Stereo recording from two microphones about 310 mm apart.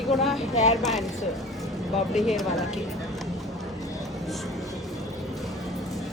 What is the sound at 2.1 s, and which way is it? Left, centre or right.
Speech, centre.